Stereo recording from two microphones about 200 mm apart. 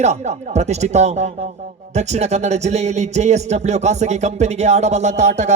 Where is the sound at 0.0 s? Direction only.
35° right (ahead or behind).